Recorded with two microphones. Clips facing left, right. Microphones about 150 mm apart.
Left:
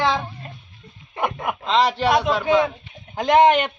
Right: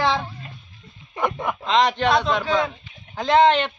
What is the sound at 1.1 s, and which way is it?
Speech, 20° left (ahead or behind).